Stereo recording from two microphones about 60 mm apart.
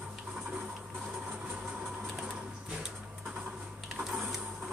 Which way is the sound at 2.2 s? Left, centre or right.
Centre.